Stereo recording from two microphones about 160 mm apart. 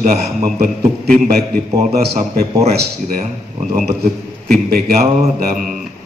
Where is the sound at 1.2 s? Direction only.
60° right (ahead or behind).